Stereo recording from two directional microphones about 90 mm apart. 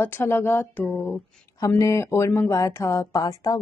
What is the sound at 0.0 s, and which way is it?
A woman's voice, 25° left (ahead or behind).